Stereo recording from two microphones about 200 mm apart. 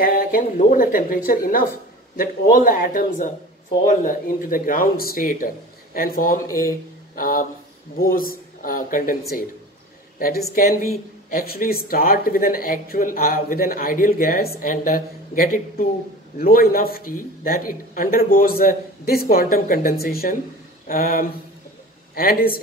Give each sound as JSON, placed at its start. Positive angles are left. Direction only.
{"t": 0.0, "sound": "speech", "side_deg": 45}